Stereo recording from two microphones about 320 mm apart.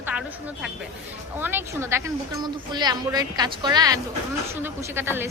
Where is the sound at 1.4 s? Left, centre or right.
Centre.